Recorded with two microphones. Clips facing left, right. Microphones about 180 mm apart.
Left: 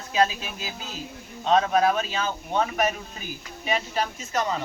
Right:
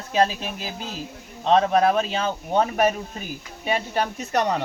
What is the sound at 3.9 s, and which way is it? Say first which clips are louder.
Speech: right 4 dB; 60° right (ahead or behind).